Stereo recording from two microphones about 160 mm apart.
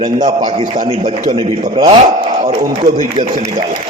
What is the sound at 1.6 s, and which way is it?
Speech, 45° right (ahead or behind).